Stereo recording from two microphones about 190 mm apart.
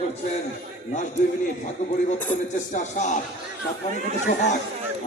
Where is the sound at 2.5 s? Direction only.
40° left (ahead or behind).